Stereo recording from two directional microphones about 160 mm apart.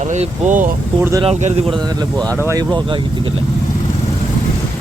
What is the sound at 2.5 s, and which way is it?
Speech, 25° right (ahead or behind).